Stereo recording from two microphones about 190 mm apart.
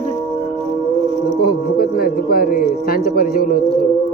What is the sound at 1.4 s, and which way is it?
Music, 50° left (ahead or behind).